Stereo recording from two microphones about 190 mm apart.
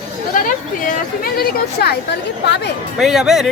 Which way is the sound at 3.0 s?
Centre (ahead or behind).